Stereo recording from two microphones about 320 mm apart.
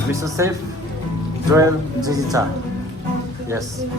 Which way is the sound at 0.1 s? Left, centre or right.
Centre.